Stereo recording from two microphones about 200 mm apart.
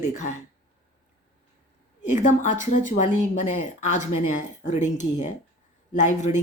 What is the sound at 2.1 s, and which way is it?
Speech, 40° left (ahead or behind).